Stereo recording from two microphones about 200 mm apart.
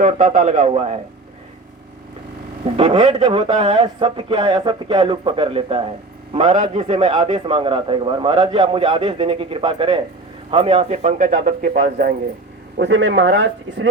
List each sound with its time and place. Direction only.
0.0 s speech: 40° right (ahead or behind)
2.7 s a man's voice: 30° right (ahead or behind); by 12.1 s 45° right (ahead or behind)
12.7 s speech: 60° right (ahead or behind)